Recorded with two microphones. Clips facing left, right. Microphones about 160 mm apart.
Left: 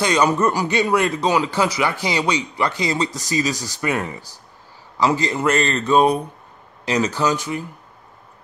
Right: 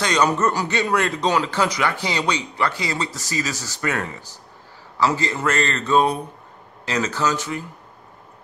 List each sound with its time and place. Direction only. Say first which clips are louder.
0.0 s speech: left 2 dB; 10° left (ahead or behind)